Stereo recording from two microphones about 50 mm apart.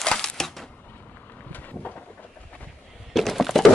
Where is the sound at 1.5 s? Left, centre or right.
Left.